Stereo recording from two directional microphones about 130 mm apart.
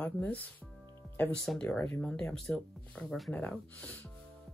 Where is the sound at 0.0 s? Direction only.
15° left (ahead or behind).